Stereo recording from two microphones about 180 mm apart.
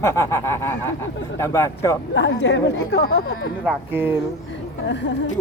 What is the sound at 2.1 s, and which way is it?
A woman's voice, 80° left.